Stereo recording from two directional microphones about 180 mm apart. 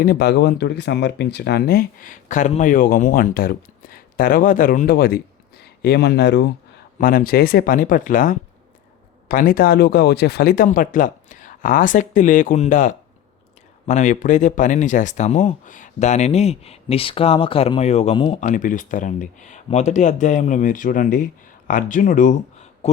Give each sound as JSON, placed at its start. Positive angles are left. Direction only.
{"t": 0.0, "sound": "speech", "side_deg": 60}
{"t": 7.0, "sound": "speech", "side_deg": 50}